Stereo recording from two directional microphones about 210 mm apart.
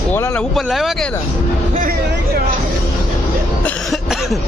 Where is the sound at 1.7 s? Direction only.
40° right (ahead or behind).